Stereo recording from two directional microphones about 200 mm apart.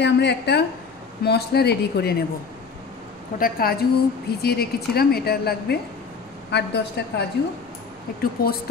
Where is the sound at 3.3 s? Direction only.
45° left (ahead or behind).